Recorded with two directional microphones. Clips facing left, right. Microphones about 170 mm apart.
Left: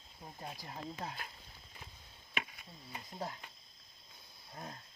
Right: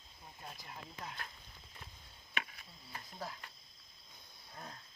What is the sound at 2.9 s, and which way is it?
Speech, 25° left (ahead or behind).